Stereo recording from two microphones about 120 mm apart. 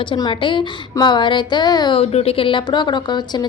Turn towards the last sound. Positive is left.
turn(degrees=35)  # may be behind; listen again after turning